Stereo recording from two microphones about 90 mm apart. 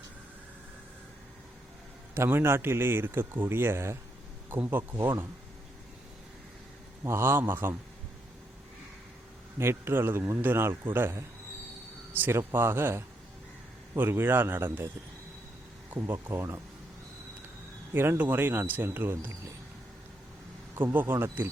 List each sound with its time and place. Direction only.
2.1 s speech: 25° right (ahead or behind)
7.0 s speech: 30° right (ahead or behind)
9.6 s speech: 25° right (ahead or behind)
15.9 s speech: 25° right (ahead or behind)
17.9 s speech: 25° right (ahead or behind)
20.7 s speech: 20° right (ahead or behind)